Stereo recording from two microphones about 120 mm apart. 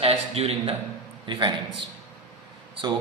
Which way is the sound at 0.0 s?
55° right (ahead or behind).